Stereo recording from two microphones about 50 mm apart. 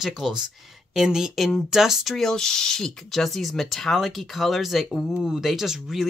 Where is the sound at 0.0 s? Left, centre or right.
Centre.